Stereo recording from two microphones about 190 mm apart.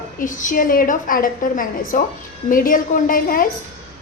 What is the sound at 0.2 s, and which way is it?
A woman's voice, 45° left (ahead or behind).